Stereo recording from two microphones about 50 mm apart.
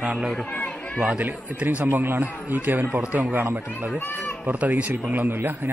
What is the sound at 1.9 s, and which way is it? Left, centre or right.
Speech, right.